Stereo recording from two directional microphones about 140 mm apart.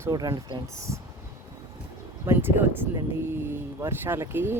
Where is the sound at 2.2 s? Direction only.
15° right (ahead or behind).